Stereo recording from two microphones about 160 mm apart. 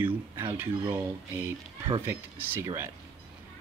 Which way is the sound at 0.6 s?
15° right (ahead or behind).